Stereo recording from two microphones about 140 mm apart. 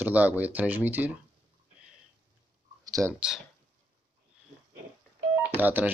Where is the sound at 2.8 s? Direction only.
25° right (ahead or behind).